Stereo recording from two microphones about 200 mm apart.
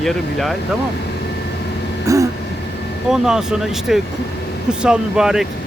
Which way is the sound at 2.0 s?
15° right (ahead or behind).